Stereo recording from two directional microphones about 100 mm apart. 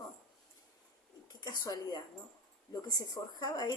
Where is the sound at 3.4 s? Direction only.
40° left (ahead or behind).